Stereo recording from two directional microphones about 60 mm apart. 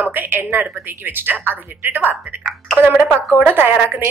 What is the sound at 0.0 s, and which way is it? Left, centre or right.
A woman's voice, right.